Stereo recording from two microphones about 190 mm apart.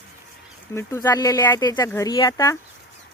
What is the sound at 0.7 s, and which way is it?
Speech, 15° left (ahead or behind).